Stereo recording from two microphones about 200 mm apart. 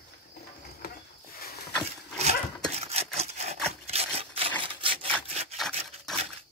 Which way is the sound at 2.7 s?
30° right (ahead or behind).